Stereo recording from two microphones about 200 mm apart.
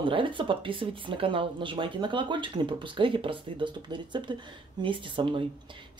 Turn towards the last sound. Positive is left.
turn(degrees=-25)  # may be behind; listen again after turning